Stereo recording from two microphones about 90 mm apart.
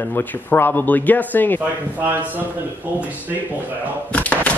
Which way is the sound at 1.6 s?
20° right (ahead or behind).